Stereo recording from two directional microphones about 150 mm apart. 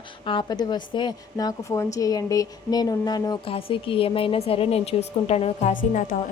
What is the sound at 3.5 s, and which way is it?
A woman's voice, 35° left (ahead or behind).